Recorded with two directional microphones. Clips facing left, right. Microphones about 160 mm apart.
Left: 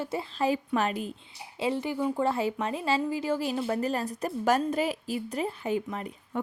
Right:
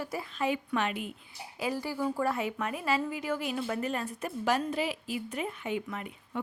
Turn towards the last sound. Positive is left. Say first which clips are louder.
# left 3 dB
turn(degrees=35)  # may be behind; listen again after turning